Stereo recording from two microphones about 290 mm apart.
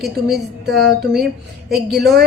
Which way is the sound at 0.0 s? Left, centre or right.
Centre.